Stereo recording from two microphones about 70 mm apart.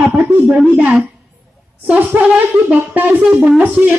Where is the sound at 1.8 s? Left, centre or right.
Right.